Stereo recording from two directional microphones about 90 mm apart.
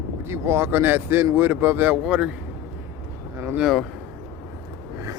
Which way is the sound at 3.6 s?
Centre (ahead or behind).